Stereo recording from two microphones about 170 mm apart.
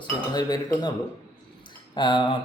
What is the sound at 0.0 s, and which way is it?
Speech, 25° left (ahead or behind).